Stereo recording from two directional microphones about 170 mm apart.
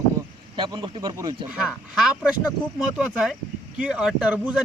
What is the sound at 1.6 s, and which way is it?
Speech, 5° right (ahead or behind).